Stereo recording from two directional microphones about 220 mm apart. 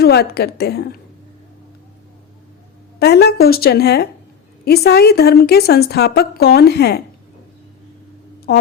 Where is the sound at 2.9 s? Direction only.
45° left (ahead or behind).